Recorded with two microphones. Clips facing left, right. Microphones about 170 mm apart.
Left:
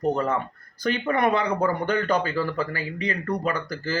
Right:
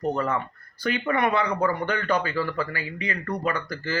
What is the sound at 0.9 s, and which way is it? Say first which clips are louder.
A man's voice: left 2 dB; 40° left (ahead or behind).